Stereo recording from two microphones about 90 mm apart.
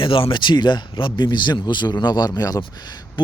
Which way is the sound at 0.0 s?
75° left (ahead or behind).